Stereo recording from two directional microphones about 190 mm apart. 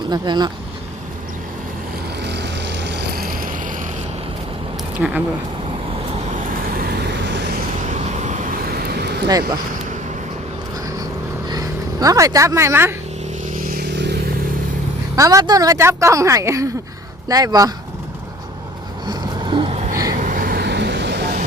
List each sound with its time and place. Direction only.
0.1 s speech: 20° right (ahead or behind)
2.2 s vehicle: 65° right (ahead or behind); by 3.8 s 45° right (ahead or behind)
4.9 s speech: 10° right (ahead or behind)
7.0 s vehicle: 65° right (ahead or behind)
7.9 s vehicle: 40° right (ahead or behind)
8.8 s vehicle: 60° right (ahead or behind)
11.4 s speech: 20° right (ahead or behind)
13.4 s vehicle: 45° right (ahead or behind); by 14.3 s 60° right (ahead or behind)
15.1 s a woman's voice: 15° right (ahead or behind)
19.0 s vehicle: 20° right (ahead or behind)
20.1 s vehicle: 45° right (ahead or behind); by 21.3 s 60° right (ahead or behind)